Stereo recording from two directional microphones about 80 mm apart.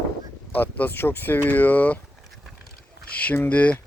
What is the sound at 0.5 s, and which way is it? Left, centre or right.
Speech, left.